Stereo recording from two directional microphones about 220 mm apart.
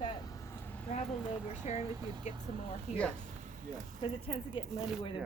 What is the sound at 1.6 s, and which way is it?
Speech, 30° left (ahead or behind).